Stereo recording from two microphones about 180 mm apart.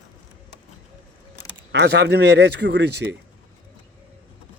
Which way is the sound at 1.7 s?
70° right (ahead or behind).